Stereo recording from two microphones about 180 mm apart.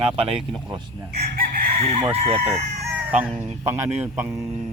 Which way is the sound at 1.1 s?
60° right (ahead or behind).